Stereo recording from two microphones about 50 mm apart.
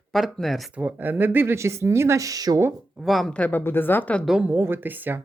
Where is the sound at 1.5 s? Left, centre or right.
Right.